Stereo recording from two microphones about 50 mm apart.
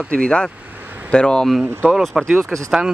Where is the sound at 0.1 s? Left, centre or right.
Centre.